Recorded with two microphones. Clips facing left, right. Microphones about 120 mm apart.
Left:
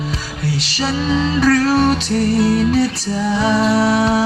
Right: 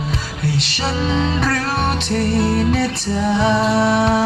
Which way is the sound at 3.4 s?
25° right (ahead or behind).